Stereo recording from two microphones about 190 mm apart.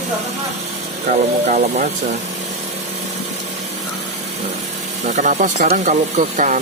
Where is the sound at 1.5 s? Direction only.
40° right (ahead or behind).